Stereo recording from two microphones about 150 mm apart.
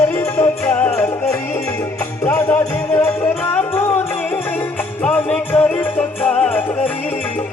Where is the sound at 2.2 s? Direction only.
15° left (ahead or behind).